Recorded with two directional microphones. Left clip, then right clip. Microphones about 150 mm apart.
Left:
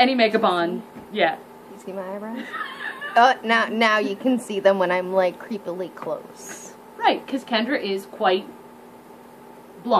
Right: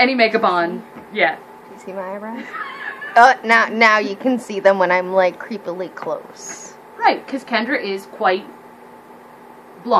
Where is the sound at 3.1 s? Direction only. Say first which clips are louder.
Right 6 dB; 10° left (ahead or behind).